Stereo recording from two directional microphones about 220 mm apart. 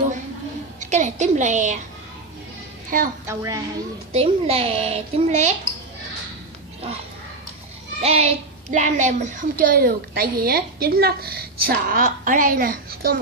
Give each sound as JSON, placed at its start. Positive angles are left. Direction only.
{"t": 0.8, "sound": "a woman's voice", "side_deg": -35}
{"t": 2.9, "sound": "a woman's voice", "side_deg": -40}
{"t": 3.2, "sound": "a woman's voice", "side_deg": -15}
{"t": 4.1, "sound": "speech", "side_deg": -25}
{"t": 8.0, "sound": "a woman's voice", "side_deg": -30}